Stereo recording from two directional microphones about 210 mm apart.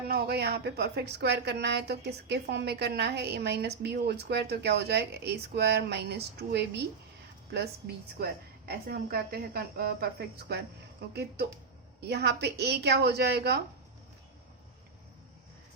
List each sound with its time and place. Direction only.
0.1 s a woman's voice: 50° right (ahead or behind)
8.2 s a woman's voice: 50° right (ahead or behind)